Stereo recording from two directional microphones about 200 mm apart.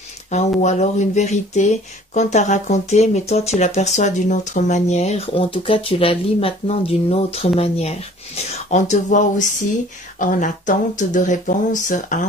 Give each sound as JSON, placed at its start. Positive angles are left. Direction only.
{"t": 0.3, "sound": "speech", "side_deg": 35}